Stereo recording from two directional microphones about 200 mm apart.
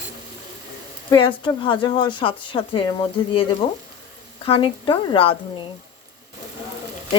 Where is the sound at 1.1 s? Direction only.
25° left (ahead or behind).